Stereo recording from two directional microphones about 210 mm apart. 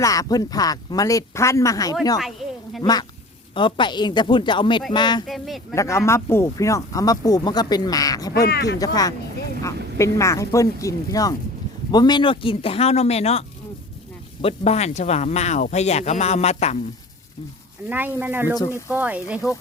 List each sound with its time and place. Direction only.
0.0 s speech: 15° left (ahead or behind)
5.3 s speech: centre (ahead or behind)
5.7 s speech: 15° left (ahead or behind)
8.3 s speech: 50° left (ahead or behind)
8.8 s speech: 15° left (ahead or behind)
14.4 s speech: 30° left (ahead or behind)
17.8 s speech: 10° right (ahead or behind)